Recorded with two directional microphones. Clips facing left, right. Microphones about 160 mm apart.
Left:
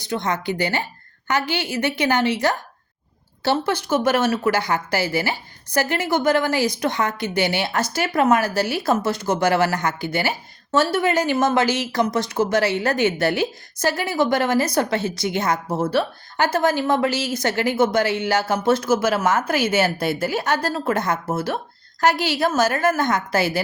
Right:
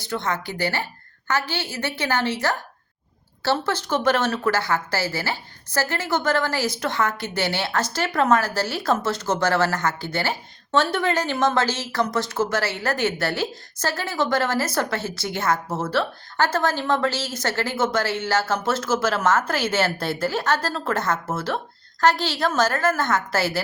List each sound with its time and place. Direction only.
0.0 s a woman's voice: 15° left (ahead or behind)